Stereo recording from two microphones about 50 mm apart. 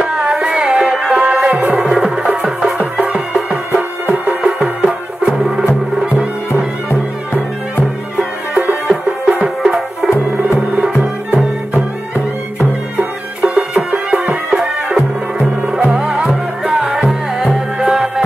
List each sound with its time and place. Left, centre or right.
0.0 s music: centre
6.9 s music: left
8.2 s music: right
9.6 s music: centre
12.9 s music: centre